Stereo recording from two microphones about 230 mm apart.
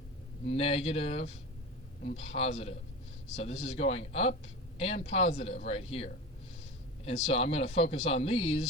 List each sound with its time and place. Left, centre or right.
0.4 s speech: left